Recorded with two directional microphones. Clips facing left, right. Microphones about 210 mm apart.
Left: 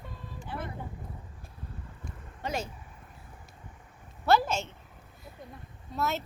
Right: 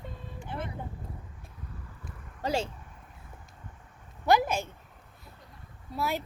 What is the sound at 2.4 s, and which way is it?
Speech, 30° right (ahead or behind).